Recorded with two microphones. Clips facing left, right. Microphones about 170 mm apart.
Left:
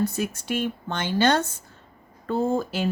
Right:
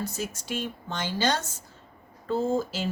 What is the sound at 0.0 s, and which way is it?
Speech, 60° left (ahead or behind).